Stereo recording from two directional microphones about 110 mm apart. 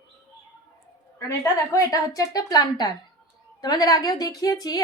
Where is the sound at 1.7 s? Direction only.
30° left (ahead or behind).